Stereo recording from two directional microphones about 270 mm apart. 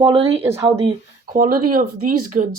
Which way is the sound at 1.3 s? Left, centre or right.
Right.